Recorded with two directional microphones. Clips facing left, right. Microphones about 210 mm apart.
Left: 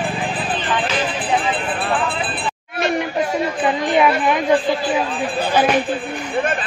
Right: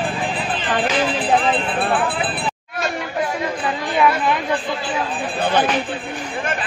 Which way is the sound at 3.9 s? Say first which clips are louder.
Even; 20° left (ahead or behind).